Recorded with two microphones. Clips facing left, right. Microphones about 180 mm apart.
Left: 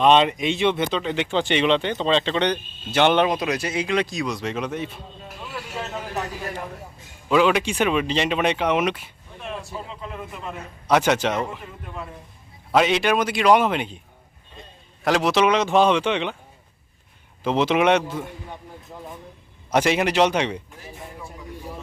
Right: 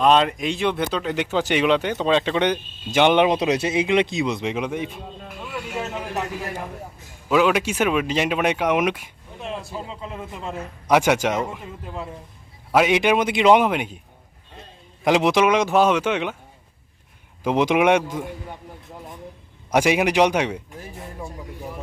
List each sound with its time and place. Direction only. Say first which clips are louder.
0.0 s speech: left 1 dB; centre (ahead or behind)
3.3 s speech: right 4 dB; 25° right (ahead or behind)
7.3 s speech: even; 5° right (ahead or behind)
9.4 s speech: right 2 dB; 25° right (ahead or behind)
10.8 s speech: right 1 dB; 10° right (ahead or behind)
12.7 s speech: right 1 dB; 10° right (ahead or behind)
13.7 s speech: right 1 dB; 10° right (ahead or behind)
15.0 s speech: right 2 dB; 15° right (ahead or behind)
17.4 s speech: right 1 dB; 10° right (ahead or behind)
19.7 s speech: right 1 dB; 10° right (ahead or behind)